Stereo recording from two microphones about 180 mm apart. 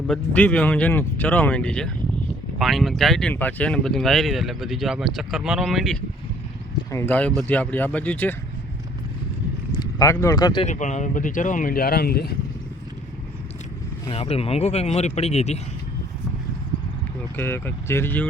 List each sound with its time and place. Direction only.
0.1 s speech: 5° left (ahead or behind)
6.9 s speech: 10° left (ahead or behind)
9.7 s speech: 20° left (ahead or behind)
10.7 s speech: 40° left (ahead or behind); by 12.3 s 60° left (ahead or behind)
14.1 s speech: 35° left (ahead or behind)
17.3 s speech: 15° left (ahead or behind)